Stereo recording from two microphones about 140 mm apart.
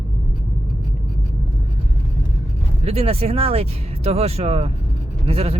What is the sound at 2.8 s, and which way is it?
Speech, 45° right (ahead or behind).